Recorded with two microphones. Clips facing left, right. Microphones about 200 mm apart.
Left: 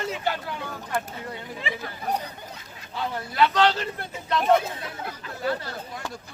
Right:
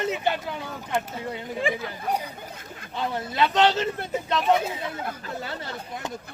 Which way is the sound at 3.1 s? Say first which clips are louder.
Left 1 dB; 20° right (ahead or behind).